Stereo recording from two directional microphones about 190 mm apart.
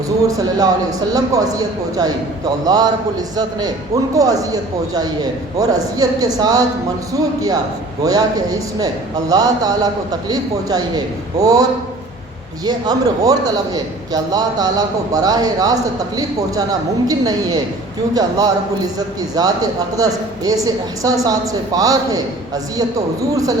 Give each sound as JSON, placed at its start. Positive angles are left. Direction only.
{"t": 0.3, "sound": "a man's voice", "side_deg": -20}
{"t": 12.6, "sound": "speech", "side_deg": -20}